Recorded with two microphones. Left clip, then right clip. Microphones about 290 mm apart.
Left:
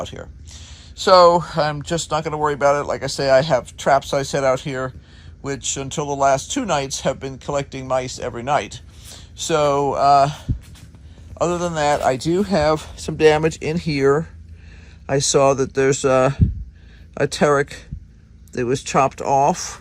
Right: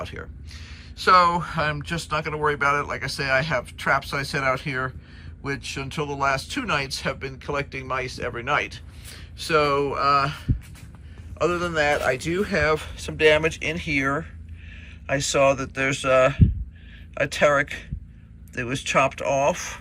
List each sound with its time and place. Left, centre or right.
0.0 s speech: centre
15.1 s speech: centre